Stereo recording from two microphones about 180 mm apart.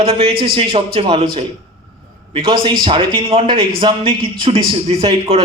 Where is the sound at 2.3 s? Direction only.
30° right (ahead or behind).